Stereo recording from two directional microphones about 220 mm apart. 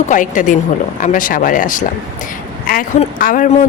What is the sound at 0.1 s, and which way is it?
Speech, 35° left (ahead or behind).